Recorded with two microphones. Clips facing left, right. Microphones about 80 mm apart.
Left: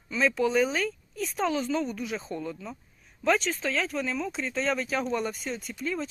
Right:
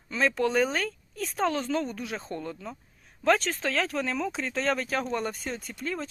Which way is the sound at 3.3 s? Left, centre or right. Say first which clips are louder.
Right 1 dB; right.